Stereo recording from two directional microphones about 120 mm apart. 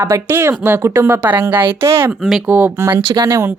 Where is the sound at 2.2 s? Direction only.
10° right (ahead or behind).